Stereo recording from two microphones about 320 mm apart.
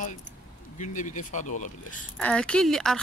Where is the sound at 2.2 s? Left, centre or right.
Centre.